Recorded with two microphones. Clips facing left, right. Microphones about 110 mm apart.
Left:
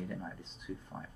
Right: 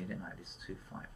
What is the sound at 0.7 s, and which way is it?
Speech, 25° left (ahead or behind).